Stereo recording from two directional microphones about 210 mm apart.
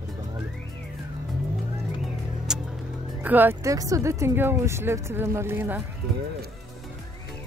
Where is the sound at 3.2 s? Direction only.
10° right (ahead or behind).